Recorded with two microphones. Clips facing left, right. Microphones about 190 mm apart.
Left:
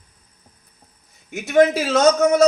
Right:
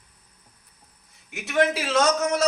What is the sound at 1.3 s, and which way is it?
Speech, 45° left (ahead or behind).